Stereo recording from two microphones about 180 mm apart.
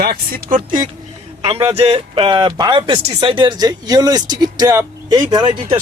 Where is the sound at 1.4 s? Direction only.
30° right (ahead or behind).